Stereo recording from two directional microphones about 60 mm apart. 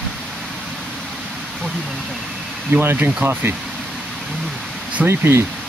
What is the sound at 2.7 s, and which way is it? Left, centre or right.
Speech, right.